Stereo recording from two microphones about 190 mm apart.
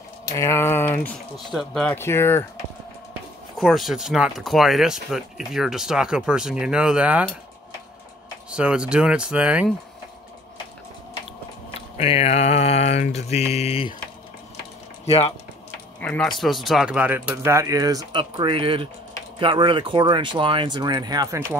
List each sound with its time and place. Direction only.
0.2 s speech: 15° left (ahead or behind)
3.5 s speech: centre (ahead or behind)
8.5 s speech: 5° right (ahead or behind)
12.0 s mantra: 35° left (ahead or behind)
15.0 s mantra: 30° left (ahead or behind)
16.0 s speech: 5° left (ahead or behind); by 21.5 s 20° right (ahead or behind)